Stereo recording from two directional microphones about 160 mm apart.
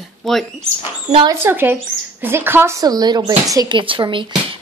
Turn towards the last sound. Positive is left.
turn(degrees=-30)  # may be behind; listen again after turning